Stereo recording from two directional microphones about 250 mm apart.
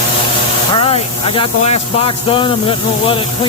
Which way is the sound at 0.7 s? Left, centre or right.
Left.